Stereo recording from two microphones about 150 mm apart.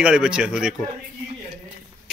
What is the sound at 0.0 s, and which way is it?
Speech, 5° right (ahead or behind).